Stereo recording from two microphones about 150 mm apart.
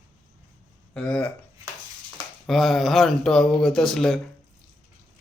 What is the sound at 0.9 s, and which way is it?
Speech, 5° left (ahead or behind).